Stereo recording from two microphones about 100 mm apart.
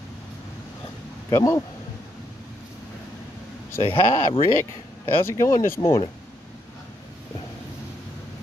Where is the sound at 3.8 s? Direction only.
65° left (ahead or behind).